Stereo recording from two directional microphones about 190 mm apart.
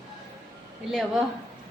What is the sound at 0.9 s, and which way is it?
Speech, centre (ahead or behind).